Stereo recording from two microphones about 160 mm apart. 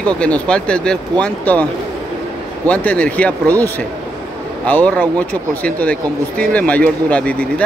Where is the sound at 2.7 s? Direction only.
10° left (ahead or behind).